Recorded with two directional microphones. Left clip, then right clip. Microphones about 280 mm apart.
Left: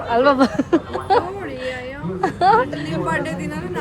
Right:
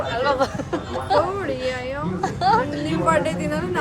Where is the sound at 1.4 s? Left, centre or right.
Centre.